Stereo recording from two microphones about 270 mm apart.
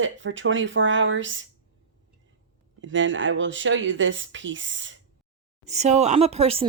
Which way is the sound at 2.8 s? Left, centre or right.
Right.